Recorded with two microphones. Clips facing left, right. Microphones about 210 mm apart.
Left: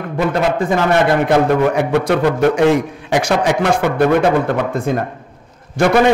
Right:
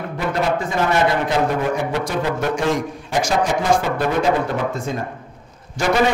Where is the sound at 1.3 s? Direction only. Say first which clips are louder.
Left 6 dB; 65° left (ahead or behind).